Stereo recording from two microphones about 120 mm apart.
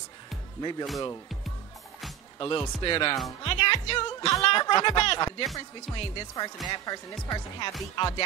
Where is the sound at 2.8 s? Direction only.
45° left (ahead or behind).